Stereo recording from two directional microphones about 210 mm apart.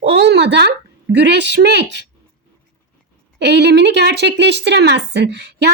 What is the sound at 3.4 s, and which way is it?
A woman's voice, 55° right (ahead or behind).